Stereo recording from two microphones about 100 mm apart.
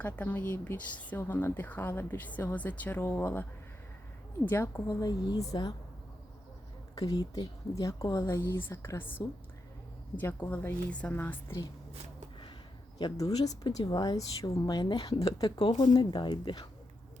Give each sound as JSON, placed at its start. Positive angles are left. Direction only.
{"t": 0.0, "sound": "a woman's voice", "side_deg": 15}
{"t": 4.4, "sound": "speech", "side_deg": 25}
{"t": 4.9, "sound": "a woman's voice", "side_deg": 35}
{"t": 6.9, "sound": "a woman's voice", "side_deg": 40}
{"t": 10.2, "sound": "a woman's voice", "side_deg": 20}
{"t": 13.1, "sound": "a woman's voice", "side_deg": 40}
{"t": 15.5, "sound": "speech", "side_deg": 90}
{"t": 15.8, "sound": "a woman's voice", "side_deg": 50}